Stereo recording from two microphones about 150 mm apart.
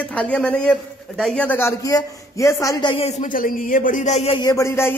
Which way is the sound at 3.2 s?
65° left (ahead or behind).